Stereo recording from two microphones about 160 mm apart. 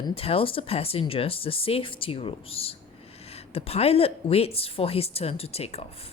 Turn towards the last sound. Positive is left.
turn(degrees=40)  # may be behind; listen again after turning